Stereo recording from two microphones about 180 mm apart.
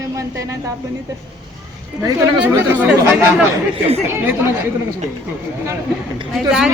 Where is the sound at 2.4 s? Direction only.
10° right (ahead or behind).